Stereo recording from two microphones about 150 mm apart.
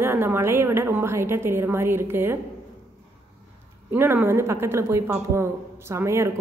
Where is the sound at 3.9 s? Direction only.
15° right (ahead or behind).